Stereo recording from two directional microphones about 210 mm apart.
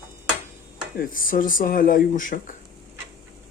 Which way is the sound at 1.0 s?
40° left (ahead or behind).